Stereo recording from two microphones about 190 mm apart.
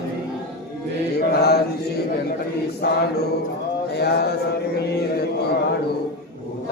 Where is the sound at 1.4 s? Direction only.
60° left (ahead or behind).